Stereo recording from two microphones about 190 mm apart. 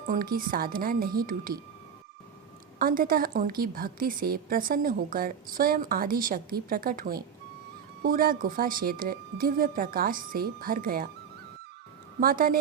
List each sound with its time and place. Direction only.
0.1 s a woman's voice: 50° right (ahead or behind)
2.7 s a woman's voice: 50° right (ahead or behind)
12.2 s a woman's voice: 50° right (ahead or behind)